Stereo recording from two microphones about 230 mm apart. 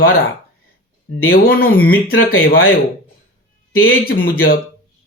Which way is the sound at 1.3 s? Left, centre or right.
Left.